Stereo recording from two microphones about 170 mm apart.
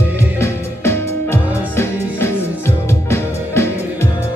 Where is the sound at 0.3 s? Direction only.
15° left (ahead or behind).